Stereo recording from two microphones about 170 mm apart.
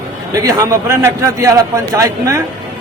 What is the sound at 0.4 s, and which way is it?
A man's voice, 20° right (ahead or behind).